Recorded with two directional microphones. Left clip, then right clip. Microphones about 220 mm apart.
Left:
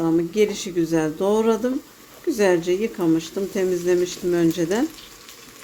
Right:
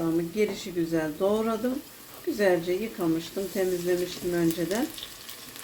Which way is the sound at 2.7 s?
50° left (ahead or behind).